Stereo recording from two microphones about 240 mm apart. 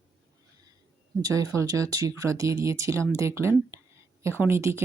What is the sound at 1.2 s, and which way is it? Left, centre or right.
Speech, centre.